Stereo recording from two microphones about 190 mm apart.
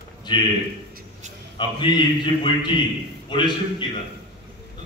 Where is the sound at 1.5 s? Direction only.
25° left (ahead or behind).